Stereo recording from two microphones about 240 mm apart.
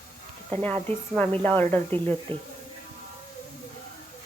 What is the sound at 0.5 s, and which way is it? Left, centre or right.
Speech, centre.